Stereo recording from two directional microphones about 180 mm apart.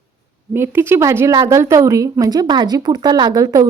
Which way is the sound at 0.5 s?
15° right (ahead or behind).